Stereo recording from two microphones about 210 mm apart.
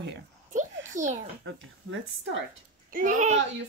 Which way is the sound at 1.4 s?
65° right (ahead or behind).